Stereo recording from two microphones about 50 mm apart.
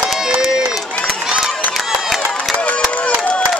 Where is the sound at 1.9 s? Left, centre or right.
Centre.